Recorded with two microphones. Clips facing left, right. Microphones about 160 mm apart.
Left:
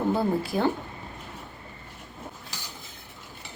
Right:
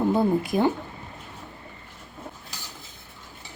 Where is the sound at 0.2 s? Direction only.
15° right (ahead or behind).